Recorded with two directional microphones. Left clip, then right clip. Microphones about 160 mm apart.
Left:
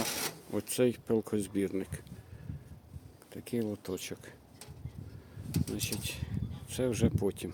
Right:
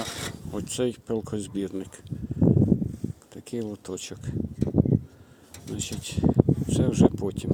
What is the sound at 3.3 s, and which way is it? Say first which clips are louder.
Speech: right 1 dB; centre (ahead or behind).